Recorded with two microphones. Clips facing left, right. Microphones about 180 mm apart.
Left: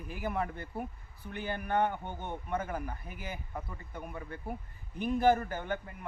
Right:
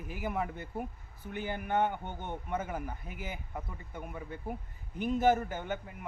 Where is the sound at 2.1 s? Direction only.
10° left (ahead or behind).